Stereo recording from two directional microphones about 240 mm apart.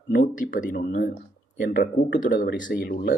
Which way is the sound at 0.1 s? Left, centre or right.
Left.